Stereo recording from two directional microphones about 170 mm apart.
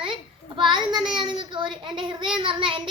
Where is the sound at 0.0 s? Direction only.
30° right (ahead or behind).